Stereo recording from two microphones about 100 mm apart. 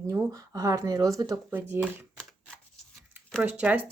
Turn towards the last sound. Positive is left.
turn(degrees=-15)  # may be behind; listen again after turning